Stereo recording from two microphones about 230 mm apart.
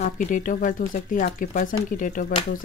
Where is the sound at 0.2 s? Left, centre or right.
Left.